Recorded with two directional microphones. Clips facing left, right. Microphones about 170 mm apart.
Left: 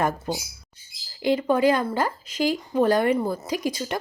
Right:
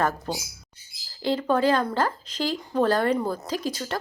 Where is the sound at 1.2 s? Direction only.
15° left (ahead or behind).